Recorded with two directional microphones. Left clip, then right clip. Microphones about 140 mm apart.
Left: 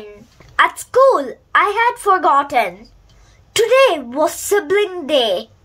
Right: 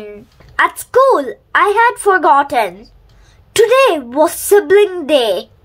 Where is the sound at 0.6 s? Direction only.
25° right (ahead or behind).